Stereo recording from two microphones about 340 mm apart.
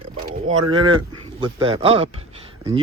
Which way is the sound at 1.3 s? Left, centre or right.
Centre.